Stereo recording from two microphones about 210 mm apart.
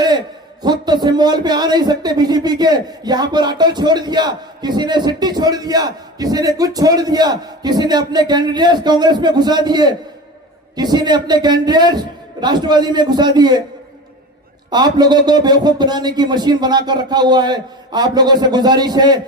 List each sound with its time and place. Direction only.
0.6 s a man's voice: 20° right (ahead or behind)
14.7 s a man's voice: 20° right (ahead or behind)